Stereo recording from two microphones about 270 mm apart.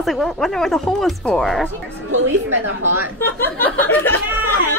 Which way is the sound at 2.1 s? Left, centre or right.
Right.